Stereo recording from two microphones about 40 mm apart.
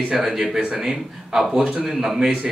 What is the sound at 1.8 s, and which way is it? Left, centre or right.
Speech, centre.